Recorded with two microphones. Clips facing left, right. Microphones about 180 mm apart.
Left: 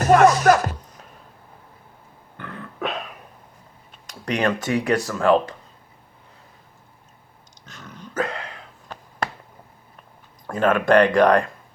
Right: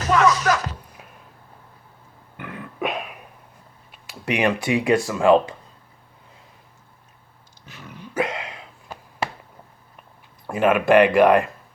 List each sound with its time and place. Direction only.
0.0 s music: 45° left (ahead or behind)
2.4 s throat clearing: 10° right (ahead or behind)
4.0 s speech: 5° right (ahead or behind)
7.6 s a sound: 10° right (ahead or behind)
10.4 s speech: 10° right (ahead or behind)